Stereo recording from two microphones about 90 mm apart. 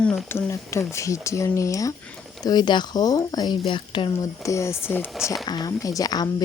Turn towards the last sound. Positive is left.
turn(degrees=45)  # may be behind; listen again after turning